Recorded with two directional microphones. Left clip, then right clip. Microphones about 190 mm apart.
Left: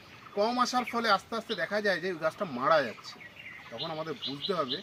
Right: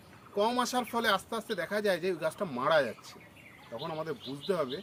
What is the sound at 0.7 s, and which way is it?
Speech, 15° right (ahead or behind).